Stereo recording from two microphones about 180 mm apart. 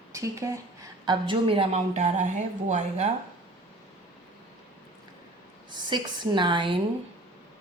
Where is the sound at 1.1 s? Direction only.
30° right (ahead or behind).